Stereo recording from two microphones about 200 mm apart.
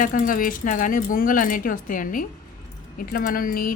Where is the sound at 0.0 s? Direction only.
45° left (ahead or behind).